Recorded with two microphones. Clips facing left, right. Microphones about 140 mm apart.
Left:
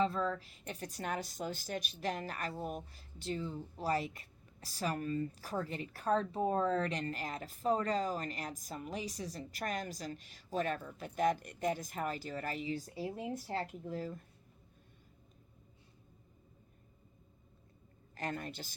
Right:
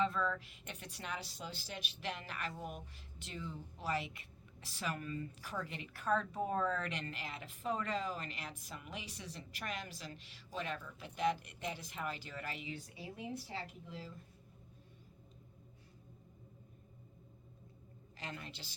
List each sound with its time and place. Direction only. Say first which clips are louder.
0.0 s speech: left 2 dB; 35° left (ahead or behind)
18.2 s a woman's voice: left 8 dB; 50° left (ahead or behind)